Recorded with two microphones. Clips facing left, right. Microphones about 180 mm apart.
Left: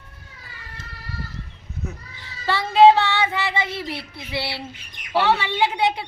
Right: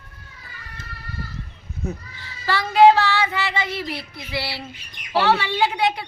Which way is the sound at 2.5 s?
25° left (ahead or behind).